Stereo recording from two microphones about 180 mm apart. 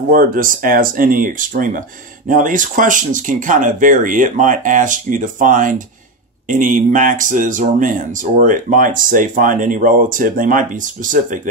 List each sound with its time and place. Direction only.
0.1 s speech: 50° right (ahead or behind)